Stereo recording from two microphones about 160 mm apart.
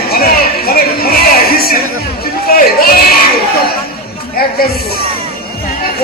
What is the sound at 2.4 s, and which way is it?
Speech, 70° left (ahead or behind).